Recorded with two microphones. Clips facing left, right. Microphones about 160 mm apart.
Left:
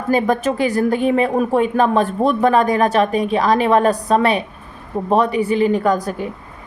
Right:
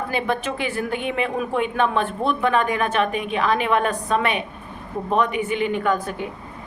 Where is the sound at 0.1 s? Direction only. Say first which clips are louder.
Left 11 dB; 40° left (ahead or behind).